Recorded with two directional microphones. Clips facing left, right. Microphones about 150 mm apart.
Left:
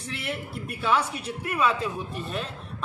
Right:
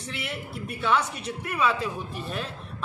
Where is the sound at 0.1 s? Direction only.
Centre (ahead or behind).